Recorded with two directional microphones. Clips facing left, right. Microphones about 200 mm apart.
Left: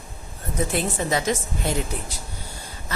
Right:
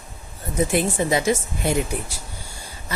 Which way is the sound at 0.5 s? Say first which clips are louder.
Right 4 dB; 10° right (ahead or behind).